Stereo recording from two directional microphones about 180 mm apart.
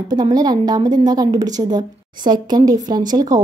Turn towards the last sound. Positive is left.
turn(degrees=-20)  # may be behind; listen again after turning